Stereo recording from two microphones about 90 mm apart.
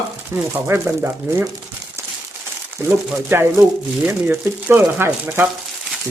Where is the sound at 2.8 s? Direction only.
30° right (ahead or behind).